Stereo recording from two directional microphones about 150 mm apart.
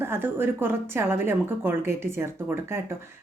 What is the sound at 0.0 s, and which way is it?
A woman's voice, 15° right (ahead or behind).